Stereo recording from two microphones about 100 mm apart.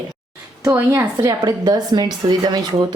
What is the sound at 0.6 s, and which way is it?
Speech, 30° right (ahead or behind).